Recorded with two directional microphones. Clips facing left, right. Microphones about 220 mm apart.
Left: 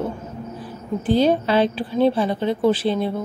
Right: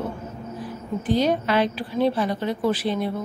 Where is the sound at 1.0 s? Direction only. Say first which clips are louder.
Left 4 dB; 30° left (ahead or behind).